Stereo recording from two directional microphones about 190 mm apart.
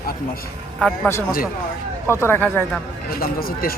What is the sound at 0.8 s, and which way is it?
Speech, centre (ahead or behind).